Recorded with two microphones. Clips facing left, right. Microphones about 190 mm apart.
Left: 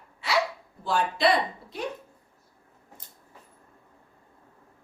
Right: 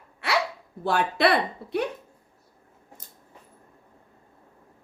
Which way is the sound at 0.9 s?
60° right (ahead or behind).